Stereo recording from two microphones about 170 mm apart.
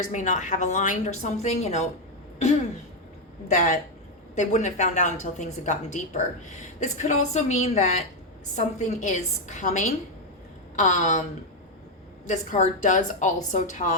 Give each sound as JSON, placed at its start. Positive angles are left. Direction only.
{"t": 0.0, "sound": "a woman's voice", "side_deg": 45}
{"t": 3.5, "sound": "a woman's voice", "side_deg": 45}
{"t": 12.2, "sound": "a woman's voice", "side_deg": 45}